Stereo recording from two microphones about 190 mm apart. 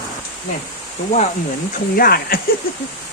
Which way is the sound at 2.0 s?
50° left (ahead or behind).